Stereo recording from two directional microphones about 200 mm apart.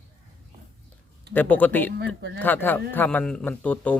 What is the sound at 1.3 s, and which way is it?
A man's voice, 10° left (ahead or behind).